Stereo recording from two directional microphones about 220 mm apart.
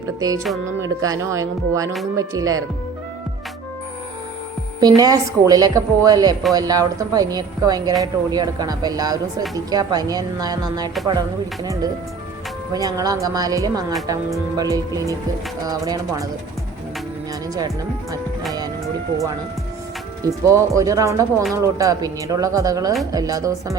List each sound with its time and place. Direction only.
0.2 s a woman's voice: 15° right (ahead or behind)
4.8 s a woman's voice: 15° right (ahead or behind)
20.2 s a woman's voice: 15° right (ahead or behind)